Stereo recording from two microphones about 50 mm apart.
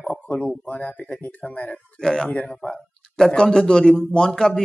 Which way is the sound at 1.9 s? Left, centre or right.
Centre.